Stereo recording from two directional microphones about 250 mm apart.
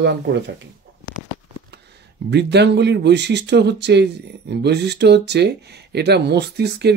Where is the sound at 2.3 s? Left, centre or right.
Right.